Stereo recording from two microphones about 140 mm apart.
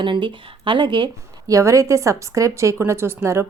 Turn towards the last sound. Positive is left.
turn(degrees=-20)  # may be behind; listen again after turning